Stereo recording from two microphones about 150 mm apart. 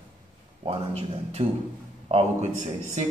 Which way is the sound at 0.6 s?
40° right (ahead or behind).